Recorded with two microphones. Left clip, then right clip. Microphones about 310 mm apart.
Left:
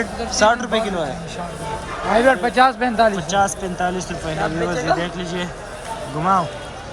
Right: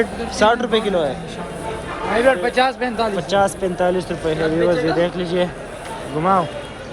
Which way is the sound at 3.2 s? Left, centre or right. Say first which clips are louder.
Right 2 dB; centre.